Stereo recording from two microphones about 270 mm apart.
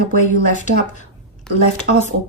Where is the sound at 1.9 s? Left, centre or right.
Right.